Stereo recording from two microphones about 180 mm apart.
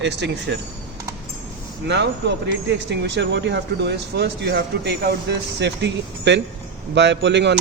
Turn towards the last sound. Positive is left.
turn(degrees=-70)  # may be behind; listen again after turning